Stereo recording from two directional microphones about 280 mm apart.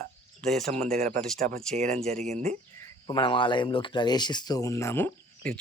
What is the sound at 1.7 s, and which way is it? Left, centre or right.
Speech, right.